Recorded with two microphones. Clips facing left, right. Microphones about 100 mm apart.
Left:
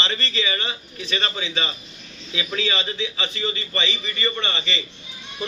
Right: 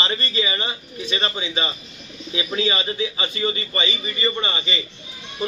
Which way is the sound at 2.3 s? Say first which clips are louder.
Right 3 dB; 25° right (ahead or behind).